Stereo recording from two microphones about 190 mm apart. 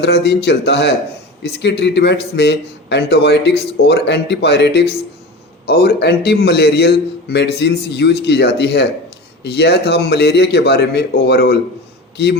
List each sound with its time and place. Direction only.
0.0 s a man's voice: 60° left (ahead or behind)